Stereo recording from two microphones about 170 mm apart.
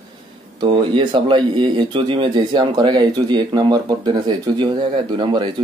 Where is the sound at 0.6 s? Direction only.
25° right (ahead or behind).